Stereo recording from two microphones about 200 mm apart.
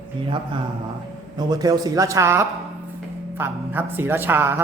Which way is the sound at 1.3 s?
20° right (ahead or behind).